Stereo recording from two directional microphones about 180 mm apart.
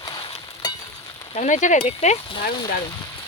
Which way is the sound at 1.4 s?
40° left (ahead or behind).